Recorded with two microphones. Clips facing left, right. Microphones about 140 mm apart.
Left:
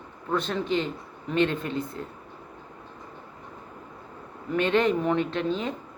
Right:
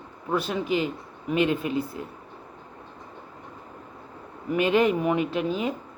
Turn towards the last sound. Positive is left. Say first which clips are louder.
# right 1 dB
turn(degrees=-10)  # may be behind; listen again after turning